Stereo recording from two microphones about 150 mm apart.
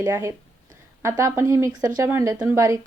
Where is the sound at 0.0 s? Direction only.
20° right (ahead or behind).